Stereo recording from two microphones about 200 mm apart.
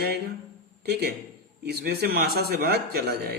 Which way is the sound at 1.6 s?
50° right (ahead or behind).